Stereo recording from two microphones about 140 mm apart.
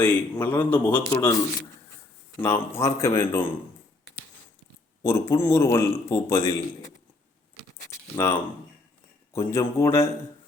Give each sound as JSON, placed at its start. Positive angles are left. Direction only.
{"t": 0.0, "sound": "a man's voice", "side_deg": 10}
{"t": 2.4, "sound": "speech", "side_deg": 20}
{"t": 5.0, "sound": "a man's voice", "side_deg": 20}
{"t": 8.1, "sound": "a man's voice", "side_deg": 15}
{"t": 9.3, "sound": "speech", "side_deg": 20}